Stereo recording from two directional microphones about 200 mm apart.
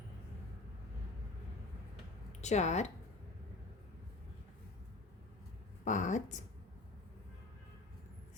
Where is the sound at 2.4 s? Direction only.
35° left (ahead or behind).